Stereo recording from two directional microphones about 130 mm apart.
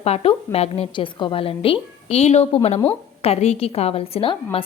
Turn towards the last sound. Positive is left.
turn(degrees=45)  # may be behind; listen again after turning